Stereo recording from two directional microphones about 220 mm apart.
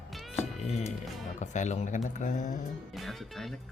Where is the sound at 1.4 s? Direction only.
35° left (ahead or behind).